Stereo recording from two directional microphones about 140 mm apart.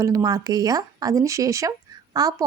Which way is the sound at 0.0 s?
25° right (ahead or behind).